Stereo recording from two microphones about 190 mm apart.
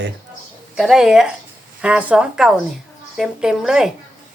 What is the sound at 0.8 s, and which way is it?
Speech, centre (ahead or behind).